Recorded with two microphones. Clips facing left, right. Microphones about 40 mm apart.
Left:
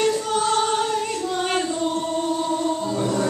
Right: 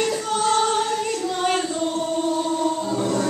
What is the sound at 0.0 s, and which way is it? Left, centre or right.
Choir, centre.